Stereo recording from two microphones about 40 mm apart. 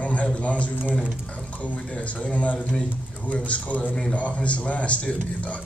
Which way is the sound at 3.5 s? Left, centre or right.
Left.